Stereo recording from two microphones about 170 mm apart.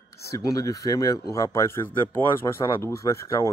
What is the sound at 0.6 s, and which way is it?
A man's voice, 20° left (ahead or behind).